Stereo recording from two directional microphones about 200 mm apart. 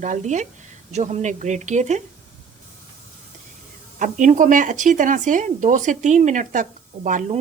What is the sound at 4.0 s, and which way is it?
Speech, 40° right (ahead or behind).